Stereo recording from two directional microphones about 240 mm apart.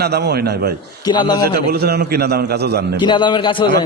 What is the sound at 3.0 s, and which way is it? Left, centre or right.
Speech, centre.